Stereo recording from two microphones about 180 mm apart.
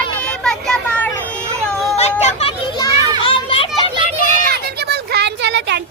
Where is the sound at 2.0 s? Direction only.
35° left (ahead or behind).